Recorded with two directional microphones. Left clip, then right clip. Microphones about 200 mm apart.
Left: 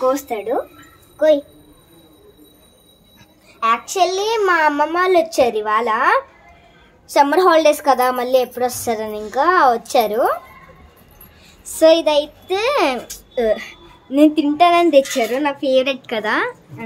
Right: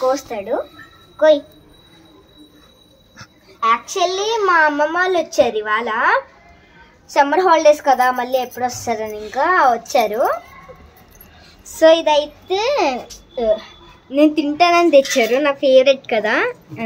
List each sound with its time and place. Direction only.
0.1 s speech: 35° left (ahead or behind)
3.5 s a woman's voice: 15° left (ahead or behind)
11.6 s a woman's voice: 10° left (ahead or behind)
13.3 s a woman's voice: 35° left (ahead or behind)
14.0 s a woman's voice: 10° left (ahead or behind)